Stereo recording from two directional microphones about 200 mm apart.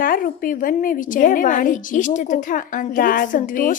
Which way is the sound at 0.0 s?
45° left (ahead or behind).